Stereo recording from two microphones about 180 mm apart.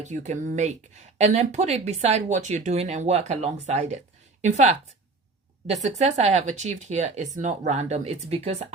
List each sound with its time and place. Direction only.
0.0 s speech: 40° right (ahead or behind)